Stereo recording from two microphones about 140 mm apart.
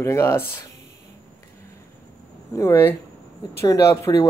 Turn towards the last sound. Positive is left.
turn(degrees=20)  # may be behind; listen again after turning